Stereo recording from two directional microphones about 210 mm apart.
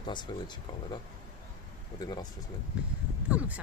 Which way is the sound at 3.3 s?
5° right (ahead or behind).